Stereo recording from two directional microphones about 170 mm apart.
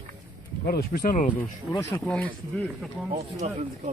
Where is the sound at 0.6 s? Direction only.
60° left (ahead or behind).